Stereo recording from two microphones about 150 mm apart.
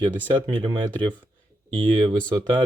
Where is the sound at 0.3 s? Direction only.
30° right (ahead or behind).